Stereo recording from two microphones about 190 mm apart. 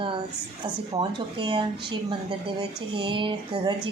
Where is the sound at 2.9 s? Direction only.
25° right (ahead or behind).